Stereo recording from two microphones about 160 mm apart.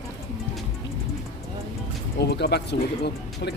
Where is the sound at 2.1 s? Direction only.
90° left.